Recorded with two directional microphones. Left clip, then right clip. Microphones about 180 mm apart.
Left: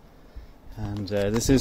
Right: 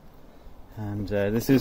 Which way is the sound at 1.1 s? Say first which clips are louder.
Even; 15° left (ahead or behind).